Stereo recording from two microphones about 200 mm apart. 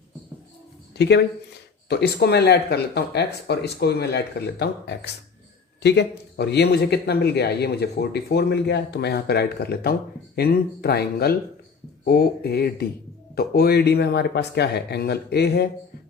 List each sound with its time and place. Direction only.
0.9 s speech: 55° left (ahead or behind)